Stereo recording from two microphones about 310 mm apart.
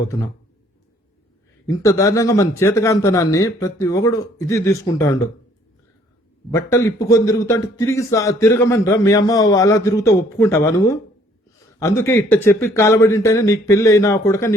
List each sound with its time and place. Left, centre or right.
1.6 s a man's voice: centre
6.5 s a man's voice: centre